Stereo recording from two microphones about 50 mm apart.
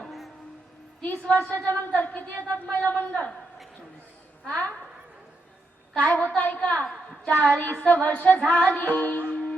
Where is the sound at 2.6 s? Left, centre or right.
Left.